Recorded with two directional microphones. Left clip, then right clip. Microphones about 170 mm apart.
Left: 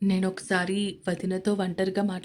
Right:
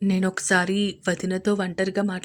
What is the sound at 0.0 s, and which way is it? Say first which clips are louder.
Speech: right 3 dB; 20° right (ahead or behind).